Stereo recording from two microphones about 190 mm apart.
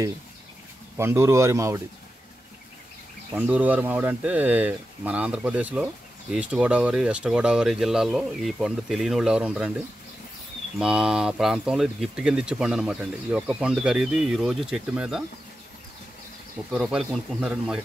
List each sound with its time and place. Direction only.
0.9 s speech: 15° right (ahead or behind)
3.3 s speech: 5° right (ahead or behind)
16.7 s speech: centre (ahead or behind)